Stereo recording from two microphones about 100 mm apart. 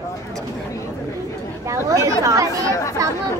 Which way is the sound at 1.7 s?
30° right (ahead or behind).